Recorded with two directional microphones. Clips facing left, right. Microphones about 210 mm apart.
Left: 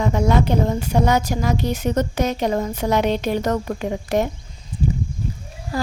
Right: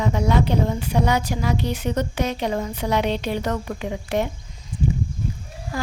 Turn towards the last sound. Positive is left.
turn(degrees=35)  # may be behind; listen again after turning